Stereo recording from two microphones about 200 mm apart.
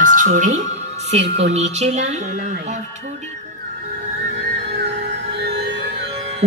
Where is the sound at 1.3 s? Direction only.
35° right (ahead or behind).